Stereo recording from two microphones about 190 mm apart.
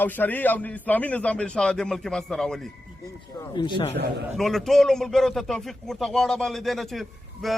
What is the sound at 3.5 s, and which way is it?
Speech, 30° left (ahead or behind).